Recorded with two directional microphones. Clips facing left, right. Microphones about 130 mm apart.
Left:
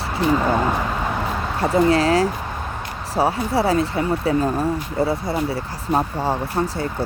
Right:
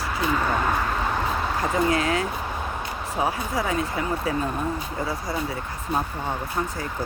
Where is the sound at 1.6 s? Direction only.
30° left (ahead or behind).